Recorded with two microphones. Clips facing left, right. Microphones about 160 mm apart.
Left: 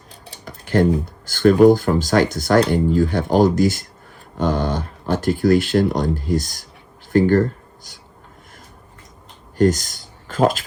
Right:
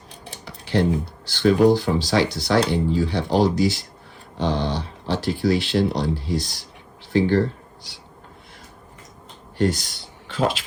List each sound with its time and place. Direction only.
0.4 s speech: 45° left (ahead or behind)
9.6 s speech: 45° left (ahead or behind)